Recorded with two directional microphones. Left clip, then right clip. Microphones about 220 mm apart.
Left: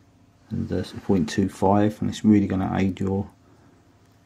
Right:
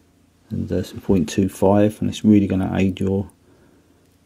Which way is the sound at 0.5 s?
25° right (ahead or behind).